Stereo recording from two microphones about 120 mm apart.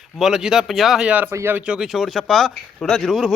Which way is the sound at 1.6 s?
5° right (ahead or behind).